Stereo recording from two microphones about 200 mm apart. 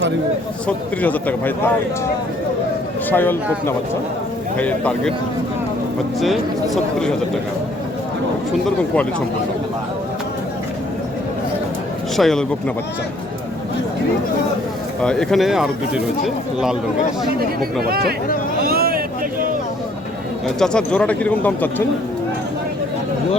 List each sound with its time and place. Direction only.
1.0 s speech: 10° left (ahead or behind)
3.1 s speech: 10° left (ahead or behind)
6.1 s speech: centre (ahead or behind)
12.1 s speech: centre (ahead or behind)
15.0 s speech: 5° left (ahead or behind)
17.8 s speech: 50° right (ahead or behind)
18.6 s vehicle: 50° right (ahead or behind)
20.6 s speech: 5° left (ahead or behind)